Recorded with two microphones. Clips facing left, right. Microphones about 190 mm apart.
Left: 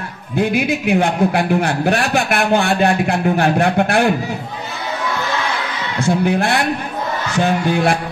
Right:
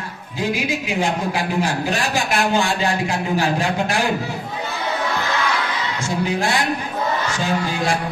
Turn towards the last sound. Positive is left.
turn(degrees=60)  # may be behind; listen again after turning